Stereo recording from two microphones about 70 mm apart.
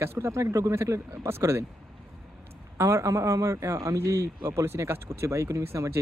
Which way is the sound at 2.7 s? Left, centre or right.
Right.